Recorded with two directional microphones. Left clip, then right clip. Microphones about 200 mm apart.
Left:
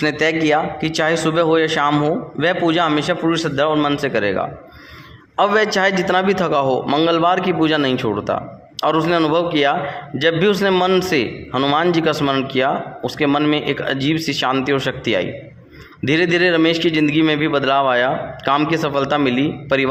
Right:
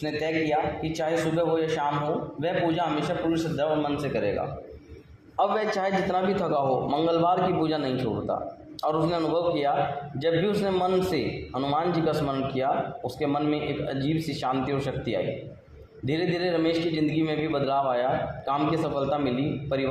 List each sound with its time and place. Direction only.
0.0 s a man's voice: 50° left (ahead or behind)
5.4 s a man's voice: 35° left (ahead or behind)